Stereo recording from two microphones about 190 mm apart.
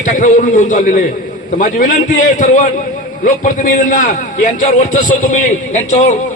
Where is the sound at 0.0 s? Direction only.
45° left (ahead or behind).